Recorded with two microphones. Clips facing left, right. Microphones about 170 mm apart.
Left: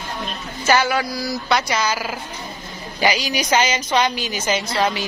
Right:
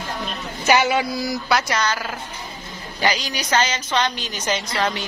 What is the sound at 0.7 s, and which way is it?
Speech, 20° right (ahead or behind).